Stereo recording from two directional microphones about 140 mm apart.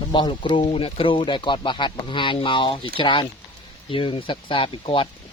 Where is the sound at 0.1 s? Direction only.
35° left (ahead or behind).